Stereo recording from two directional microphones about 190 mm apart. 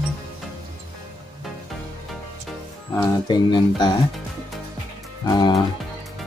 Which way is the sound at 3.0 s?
20° left (ahead or behind).